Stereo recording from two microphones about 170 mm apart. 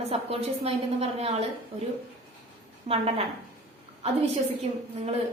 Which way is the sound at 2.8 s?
35° right (ahead or behind).